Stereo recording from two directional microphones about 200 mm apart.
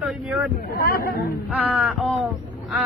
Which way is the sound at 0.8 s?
50° left (ahead or behind).